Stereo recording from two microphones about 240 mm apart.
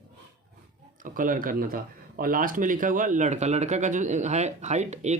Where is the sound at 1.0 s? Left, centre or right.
Right.